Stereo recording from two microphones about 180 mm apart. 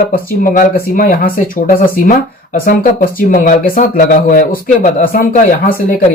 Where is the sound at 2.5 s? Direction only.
50° left (ahead or behind).